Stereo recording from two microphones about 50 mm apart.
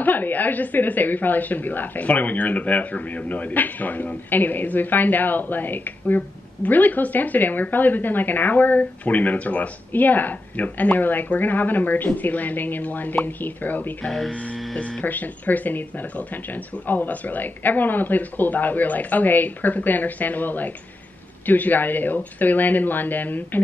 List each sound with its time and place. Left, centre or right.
0.0 s a woman's voice: left
14.3 s hum: left
14.8 s a woman's voice: left